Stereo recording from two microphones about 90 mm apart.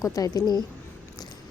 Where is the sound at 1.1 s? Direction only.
45° left (ahead or behind).